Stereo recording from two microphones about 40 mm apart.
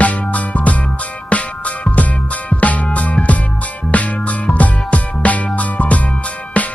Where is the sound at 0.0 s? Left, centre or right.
Left.